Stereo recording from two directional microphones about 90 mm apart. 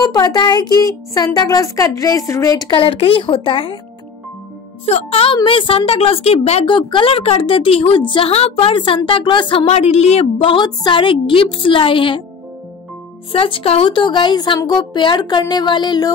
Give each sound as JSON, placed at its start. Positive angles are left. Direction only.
{"t": 0.0, "sound": "speech", "side_deg": 50}
{"t": 2.7, "sound": "speech", "side_deg": 90}
{"t": 4.8, "sound": "a woman's voice", "side_deg": 90}
{"t": 10.4, "sound": "speech", "side_deg": 65}
{"t": 13.3, "sound": "speech", "side_deg": 80}